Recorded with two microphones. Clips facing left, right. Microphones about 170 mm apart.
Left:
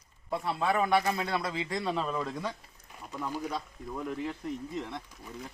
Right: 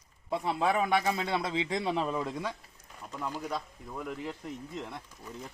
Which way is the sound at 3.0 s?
10° left (ahead or behind).